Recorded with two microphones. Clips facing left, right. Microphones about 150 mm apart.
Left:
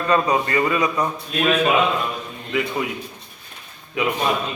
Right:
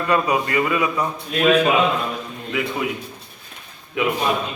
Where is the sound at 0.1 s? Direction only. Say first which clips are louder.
Left 1 dB; 30° left (ahead or behind).